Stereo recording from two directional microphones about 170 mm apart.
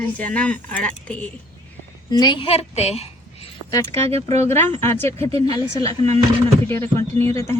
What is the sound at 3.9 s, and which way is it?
Speech, 35° right (ahead or behind).